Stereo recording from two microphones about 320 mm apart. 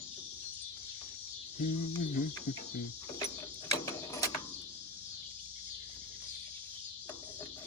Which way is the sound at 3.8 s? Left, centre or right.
Centre.